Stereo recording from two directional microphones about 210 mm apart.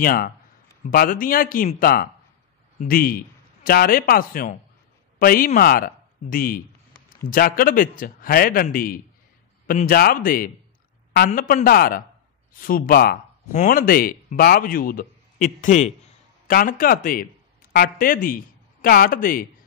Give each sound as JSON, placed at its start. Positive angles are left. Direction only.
{"t": 0.0, "sound": "a man's voice", "side_deg": 45}